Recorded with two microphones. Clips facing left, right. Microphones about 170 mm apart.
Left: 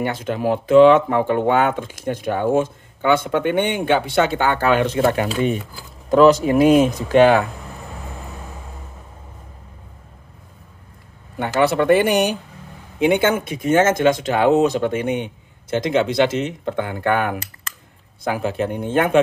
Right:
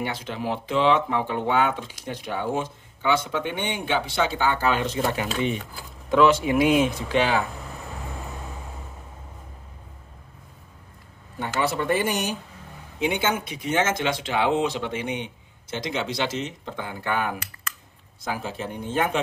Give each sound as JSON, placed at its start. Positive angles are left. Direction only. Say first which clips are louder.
{"t": 0.0, "sound": "speech", "louder": "left 8 dB", "side_deg": 50}
{"t": 6.0, "sound": "speech", "louder": "left 6 dB", "side_deg": 40}
{"t": 11.3, "sound": "speech", "louder": "left 8 dB", "side_deg": 65}